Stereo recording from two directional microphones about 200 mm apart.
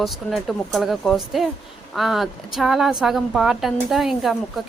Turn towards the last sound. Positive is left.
turn(degrees=0)  # may be behind; listen again after turning